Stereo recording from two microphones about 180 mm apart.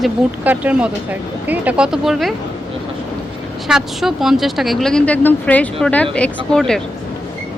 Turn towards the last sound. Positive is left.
turn(degrees=5)  # may be behind; listen again after turning